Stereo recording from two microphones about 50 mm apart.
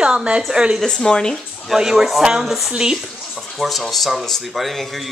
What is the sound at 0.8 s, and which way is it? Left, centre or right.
Speech, centre.